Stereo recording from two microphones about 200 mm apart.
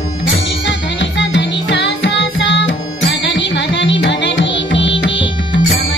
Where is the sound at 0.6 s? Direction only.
65° left (ahead or behind).